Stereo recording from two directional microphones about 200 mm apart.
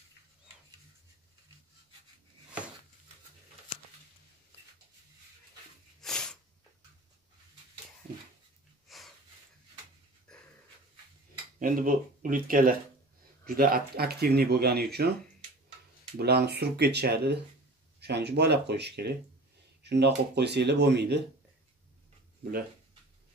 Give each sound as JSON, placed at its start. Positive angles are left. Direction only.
{"t": 5.9, "sound": "sneeze", "side_deg": 0}
{"t": 8.8, "sound": "a sound", "side_deg": 0}
{"t": 11.6, "sound": "speech", "side_deg": -45}
{"t": 16.2, "sound": "speech", "side_deg": -55}
{"t": 19.8, "sound": "a sound", "side_deg": -60}
{"t": 20.3, "sound": "speech", "side_deg": -55}